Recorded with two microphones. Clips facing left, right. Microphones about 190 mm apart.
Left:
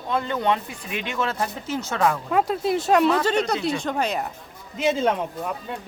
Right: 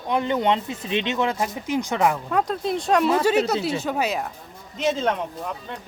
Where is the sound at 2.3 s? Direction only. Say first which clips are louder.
Left 2 dB; 5° left (ahead or behind).